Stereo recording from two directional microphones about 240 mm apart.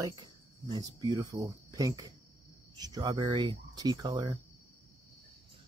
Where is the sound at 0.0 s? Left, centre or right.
Centre.